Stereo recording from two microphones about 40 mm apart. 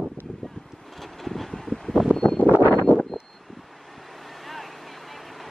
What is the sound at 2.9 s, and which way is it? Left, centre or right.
Vehicle, left.